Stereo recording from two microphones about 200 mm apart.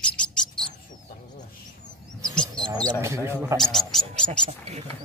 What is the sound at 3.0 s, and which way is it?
Speech, 15° right (ahead or behind).